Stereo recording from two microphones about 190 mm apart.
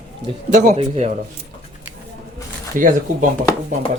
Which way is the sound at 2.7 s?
45° right (ahead or behind).